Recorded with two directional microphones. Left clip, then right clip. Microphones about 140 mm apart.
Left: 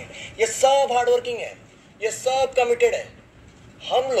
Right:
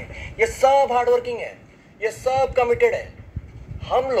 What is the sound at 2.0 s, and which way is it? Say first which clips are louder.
Speech: right 1 dB; 55° right (ahead or behind).